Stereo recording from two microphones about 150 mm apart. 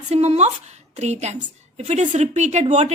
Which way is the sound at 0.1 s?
45° right (ahead or behind).